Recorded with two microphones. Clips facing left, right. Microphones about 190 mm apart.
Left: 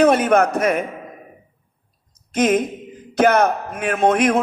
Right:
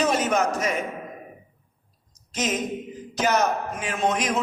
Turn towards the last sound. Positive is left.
turn(degrees=55)  # may be behind; listen again after turning